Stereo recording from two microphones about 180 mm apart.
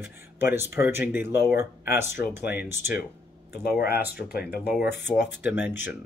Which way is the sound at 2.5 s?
10° right (ahead or behind).